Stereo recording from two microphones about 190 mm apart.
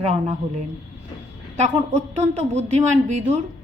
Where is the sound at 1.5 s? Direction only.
35° right (ahead or behind).